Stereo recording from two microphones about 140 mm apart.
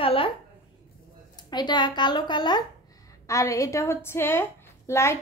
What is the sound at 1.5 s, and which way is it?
A woman's voice, 30° left (ahead or behind).